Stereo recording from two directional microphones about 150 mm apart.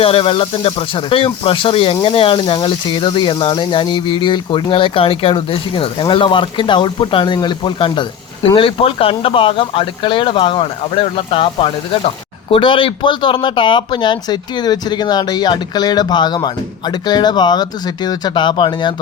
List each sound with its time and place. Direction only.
0.0 s speech: 35° left (ahead or behind)